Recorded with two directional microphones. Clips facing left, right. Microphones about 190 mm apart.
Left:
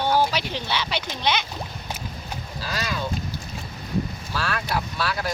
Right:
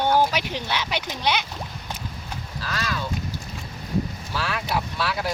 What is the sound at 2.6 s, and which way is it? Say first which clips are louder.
Speech: even; 20° left (ahead or behind).